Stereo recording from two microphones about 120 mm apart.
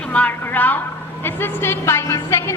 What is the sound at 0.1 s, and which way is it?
A woman's voice, 15° left (ahead or behind).